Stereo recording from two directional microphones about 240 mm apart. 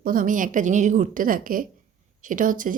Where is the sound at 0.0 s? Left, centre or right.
Right.